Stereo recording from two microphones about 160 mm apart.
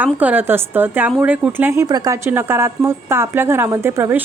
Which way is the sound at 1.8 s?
25° right (ahead or behind).